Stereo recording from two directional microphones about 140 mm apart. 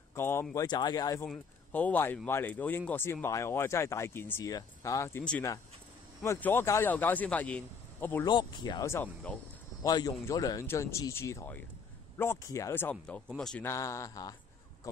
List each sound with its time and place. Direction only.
0.1 s speech: 15° left (ahead or behind)
0.7 s speech: 30° left (ahead or behind)
1.2 s a man's voice: 10° left (ahead or behind)
6.2 s a man's voice: 20° left (ahead or behind)
8.3 s speech: 30° left (ahead or behind)
8.8 s a man's voice: 15° left (ahead or behind)
9.8 s speech: 25° left (ahead or behind)
12.9 s a man's voice: 10° left (ahead or behind)
13.7 s speech: 20° left (ahead or behind)